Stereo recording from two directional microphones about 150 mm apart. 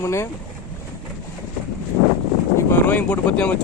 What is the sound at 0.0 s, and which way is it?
Speech, 20° left (ahead or behind).